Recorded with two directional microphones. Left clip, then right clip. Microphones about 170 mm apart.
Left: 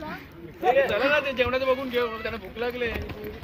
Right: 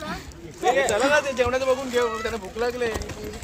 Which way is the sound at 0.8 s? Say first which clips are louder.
Right 3 dB; 85° right.